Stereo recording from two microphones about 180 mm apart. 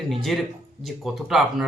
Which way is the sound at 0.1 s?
Centre (ahead or behind).